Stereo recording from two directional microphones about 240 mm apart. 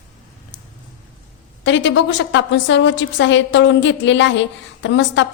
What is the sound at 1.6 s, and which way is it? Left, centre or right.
A woman's voice, left.